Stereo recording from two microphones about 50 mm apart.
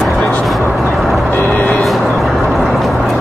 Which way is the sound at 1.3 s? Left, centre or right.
Left.